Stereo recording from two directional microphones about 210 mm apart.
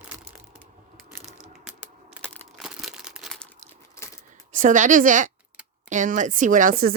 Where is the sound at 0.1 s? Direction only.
5° right (ahead or behind).